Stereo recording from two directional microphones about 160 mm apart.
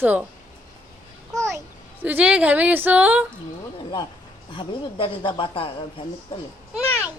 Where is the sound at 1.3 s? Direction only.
20° right (ahead or behind).